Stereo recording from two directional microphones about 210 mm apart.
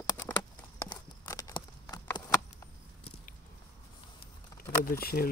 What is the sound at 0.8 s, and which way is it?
Horse, 15° left (ahead or behind).